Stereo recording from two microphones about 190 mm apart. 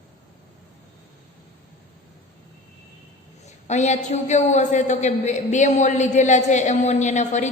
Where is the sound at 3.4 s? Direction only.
35° left (ahead or behind).